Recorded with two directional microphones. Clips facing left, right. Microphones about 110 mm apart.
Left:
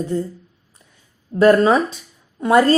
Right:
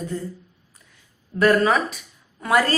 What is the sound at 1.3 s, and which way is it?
A woman's voice, 25° left (ahead or behind).